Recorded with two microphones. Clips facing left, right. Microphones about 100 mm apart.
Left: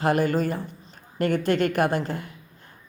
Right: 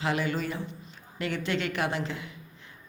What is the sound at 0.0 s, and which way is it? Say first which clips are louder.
A woman's voice: left 7 dB; 50° left (ahead or behind).